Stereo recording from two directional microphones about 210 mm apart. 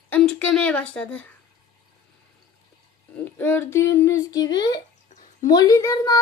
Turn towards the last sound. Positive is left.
turn(degrees=15)  # may be behind; listen again after turning